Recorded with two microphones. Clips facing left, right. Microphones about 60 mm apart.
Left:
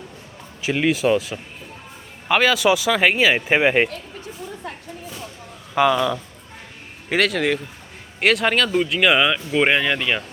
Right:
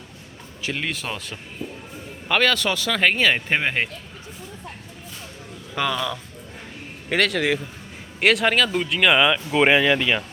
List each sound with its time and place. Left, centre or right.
0.6 s speech: centre
5.7 s speech: centre
7.1 s speech: centre